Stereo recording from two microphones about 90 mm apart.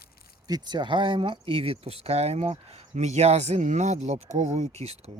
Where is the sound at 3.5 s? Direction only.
90° right.